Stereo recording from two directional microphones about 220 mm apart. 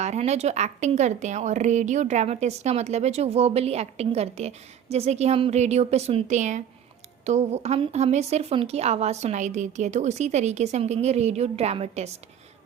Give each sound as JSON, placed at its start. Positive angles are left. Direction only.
{"t": 0.0, "sound": "speech", "side_deg": -30}